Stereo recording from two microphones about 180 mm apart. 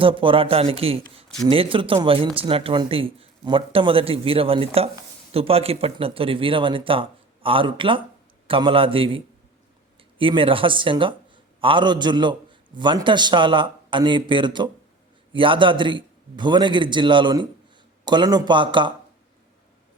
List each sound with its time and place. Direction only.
0.0 s a man's voice: 30° right (ahead or behind)